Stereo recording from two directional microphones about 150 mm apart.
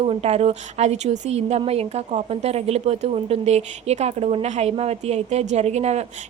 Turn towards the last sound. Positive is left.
turn(degrees=-45)  # may be behind; listen again after turning